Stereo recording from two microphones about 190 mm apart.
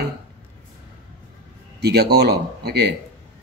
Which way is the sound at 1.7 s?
60° right (ahead or behind).